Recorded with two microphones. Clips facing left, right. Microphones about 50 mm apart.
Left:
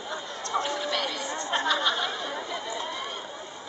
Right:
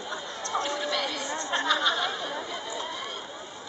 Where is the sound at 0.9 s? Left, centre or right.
Centre.